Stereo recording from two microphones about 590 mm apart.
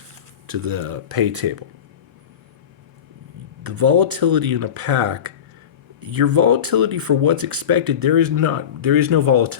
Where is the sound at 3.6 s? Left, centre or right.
Right.